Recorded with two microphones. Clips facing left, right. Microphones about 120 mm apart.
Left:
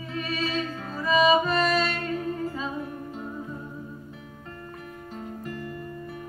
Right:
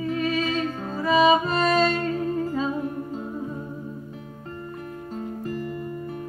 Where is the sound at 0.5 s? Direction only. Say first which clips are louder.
Right 4 dB; 35° right (ahead or behind).